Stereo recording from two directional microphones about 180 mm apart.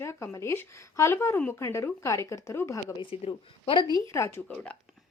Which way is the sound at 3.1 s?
30° left (ahead or behind).